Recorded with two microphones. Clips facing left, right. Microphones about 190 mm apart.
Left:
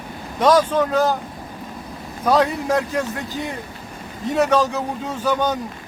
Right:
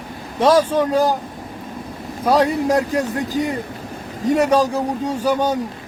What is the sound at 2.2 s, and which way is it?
Speech, 10° right (ahead or behind).